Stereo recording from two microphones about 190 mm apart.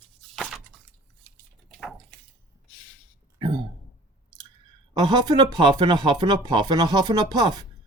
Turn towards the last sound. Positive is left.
turn(degrees=-20)  # may be behind; listen again after turning